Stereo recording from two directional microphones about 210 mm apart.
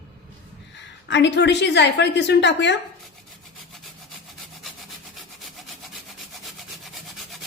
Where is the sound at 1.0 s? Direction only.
55° left (ahead or behind).